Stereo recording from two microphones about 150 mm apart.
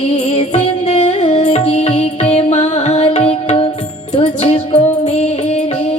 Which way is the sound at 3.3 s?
40° left (ahead or behind).